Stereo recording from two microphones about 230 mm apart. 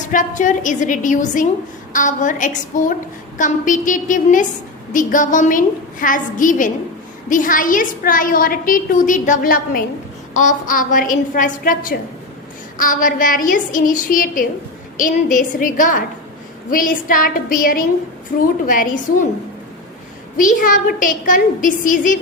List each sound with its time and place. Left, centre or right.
0.0 s a woman's voice: left
20.3 s a woman's voice: left